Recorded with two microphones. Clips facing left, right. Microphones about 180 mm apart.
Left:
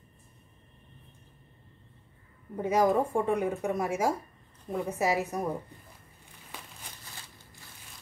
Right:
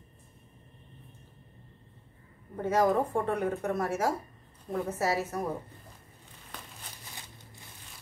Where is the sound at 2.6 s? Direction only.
10° left (ahead or behind).